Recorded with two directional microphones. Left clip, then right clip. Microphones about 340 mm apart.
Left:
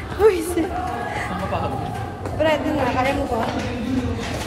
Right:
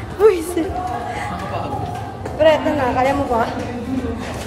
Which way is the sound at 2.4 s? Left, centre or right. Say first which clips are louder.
Right 6 dB; centre.